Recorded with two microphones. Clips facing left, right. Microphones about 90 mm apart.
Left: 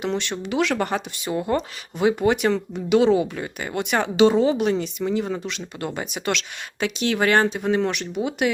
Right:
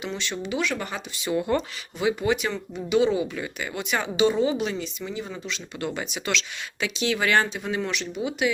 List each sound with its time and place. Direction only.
0.0 s speech: 60° left (ahead or behind)
1.3 s speech: 30° left (ahead or behind)
2.0 s speech: 50° left (ahead or behind); by 3.2 s 70° left (ahead or behind)
3.3 s speech: 40° left (ahead or behind)
3.8 s speech: 60° left (ahead or behind)
5.8 s speech: 40° left (ahead or behind)
6.2 s speech: 50° left (ahead or behind)